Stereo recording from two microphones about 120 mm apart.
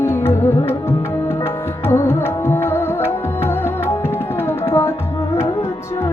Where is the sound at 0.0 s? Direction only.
20° left (ahead or behind).